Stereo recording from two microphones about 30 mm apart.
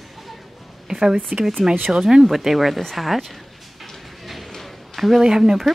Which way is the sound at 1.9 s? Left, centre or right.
Right.